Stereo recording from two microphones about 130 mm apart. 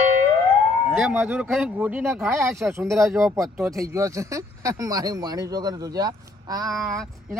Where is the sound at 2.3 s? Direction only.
20° right (ahead or behind).